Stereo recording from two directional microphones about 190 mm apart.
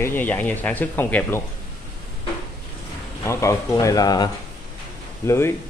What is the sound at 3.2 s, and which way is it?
Speech, 15° left (ahead or behind).